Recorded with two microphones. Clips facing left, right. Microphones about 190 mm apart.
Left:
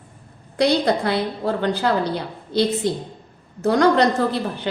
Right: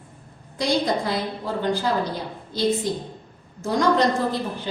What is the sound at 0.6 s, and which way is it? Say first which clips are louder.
A woman's voice: left 4 dB; 65° left (ahead or behind).